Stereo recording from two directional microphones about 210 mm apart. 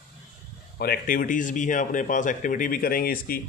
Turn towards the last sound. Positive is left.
turn(degrees=45)  # may be behind; listen again after turning